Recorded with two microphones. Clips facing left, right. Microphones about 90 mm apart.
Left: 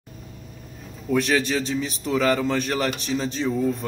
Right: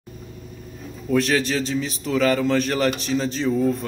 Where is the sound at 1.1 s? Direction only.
15° left (ahead or behind).